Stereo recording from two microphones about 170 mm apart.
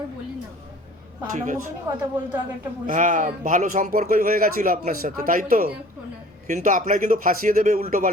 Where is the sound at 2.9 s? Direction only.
50° right (ahead or behind).